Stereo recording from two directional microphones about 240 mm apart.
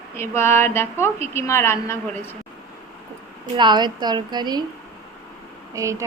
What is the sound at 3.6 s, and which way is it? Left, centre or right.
A woman's voice, centre.